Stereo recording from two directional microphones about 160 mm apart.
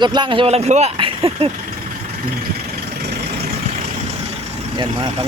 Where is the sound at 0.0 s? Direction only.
30° right (ahead or behind).